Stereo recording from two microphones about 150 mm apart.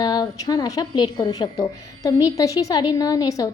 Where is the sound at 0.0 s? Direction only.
25° left (ahead or behind).